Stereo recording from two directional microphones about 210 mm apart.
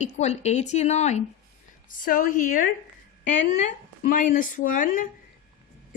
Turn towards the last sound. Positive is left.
turn(degrees=40)  # may be behind; listen again after turning